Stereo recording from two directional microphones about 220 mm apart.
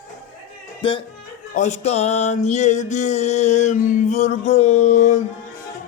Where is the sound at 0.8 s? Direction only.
25° left (ahead or behind).